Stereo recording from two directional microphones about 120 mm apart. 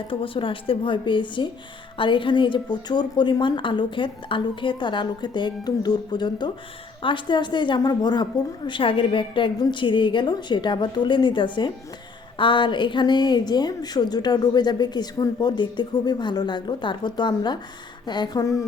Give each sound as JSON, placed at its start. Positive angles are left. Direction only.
{"t": 0.1, "sound": "a woman's voice", "side_deg": 45}